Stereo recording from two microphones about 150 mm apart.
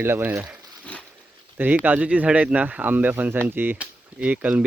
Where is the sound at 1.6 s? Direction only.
10° right (ahead or behind).